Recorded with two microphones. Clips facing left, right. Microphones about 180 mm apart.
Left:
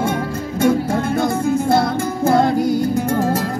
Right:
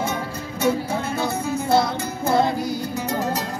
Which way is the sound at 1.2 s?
55° left (ahead or behind).